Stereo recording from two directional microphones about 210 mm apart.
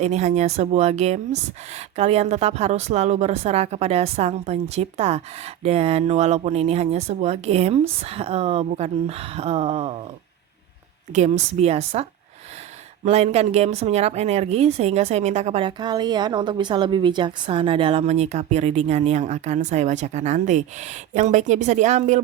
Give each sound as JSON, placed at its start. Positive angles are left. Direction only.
{"t": 0.0, "sound": "speech", "side_deg": -35}
{"t": 11.1, "sound": "speech", "side_deg": -35}
{"t": 13.1, "sound": "speech", "side_deg": -30}